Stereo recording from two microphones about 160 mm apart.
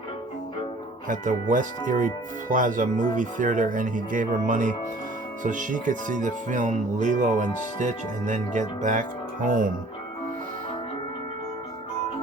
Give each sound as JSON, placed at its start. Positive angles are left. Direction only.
{"t": 1.0, "sound": "speech", "side_deg": -50}